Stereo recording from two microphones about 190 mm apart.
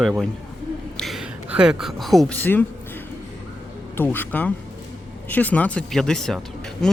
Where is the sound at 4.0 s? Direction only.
10° left (ahead or behind).